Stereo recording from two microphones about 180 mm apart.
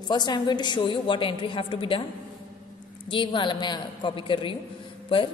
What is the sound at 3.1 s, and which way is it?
A woman's voice, 25° left (ahead or behind).